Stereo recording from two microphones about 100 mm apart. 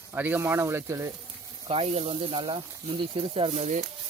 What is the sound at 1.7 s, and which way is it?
Speech, 75° right (ahead or behind).